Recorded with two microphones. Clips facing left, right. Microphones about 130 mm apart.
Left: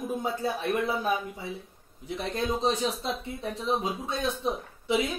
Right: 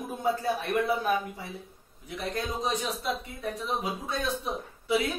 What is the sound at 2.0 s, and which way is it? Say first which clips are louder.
Speech: left 3 dB; 25° left (ahead or behind).